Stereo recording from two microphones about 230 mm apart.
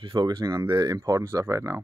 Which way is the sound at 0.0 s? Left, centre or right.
Right.